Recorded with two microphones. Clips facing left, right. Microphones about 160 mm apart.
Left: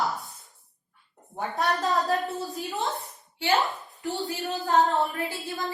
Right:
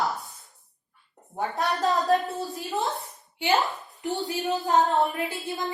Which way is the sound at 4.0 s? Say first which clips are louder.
Right 2 dB; 20° right (ahead or behind).